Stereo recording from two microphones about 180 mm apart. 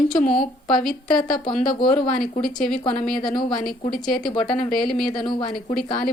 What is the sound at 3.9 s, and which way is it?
Speech, 50° left (ahead or behind).